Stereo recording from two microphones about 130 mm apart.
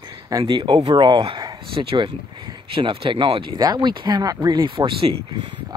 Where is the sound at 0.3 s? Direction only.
35° right (ahead or behind).